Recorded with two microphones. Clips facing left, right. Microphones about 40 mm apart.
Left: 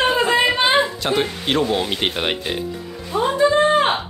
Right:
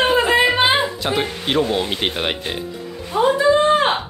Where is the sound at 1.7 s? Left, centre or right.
Centre.